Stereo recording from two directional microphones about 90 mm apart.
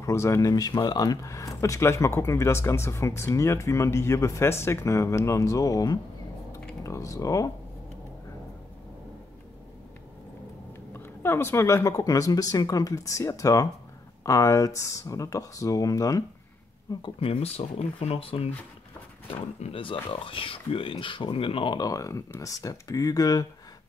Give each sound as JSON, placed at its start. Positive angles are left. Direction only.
{"t": 0.0, "sound": "speech", "side_deg": 35}
{"t": 0.7, "sound": "speech", "side_deg": 60}
{"t": 1.0, "sound": "speech", "side_deg": 40}
{"t": 10.9, "sound": "speech", "side_deg": 25}
{"t": 17.2, "sound": "speech", "side_deg": 90}
{"t": 20.9, "sound": "speech", "side_deg": 65}
{"t": 21.7, "sound": "speech", "side_deg": 40}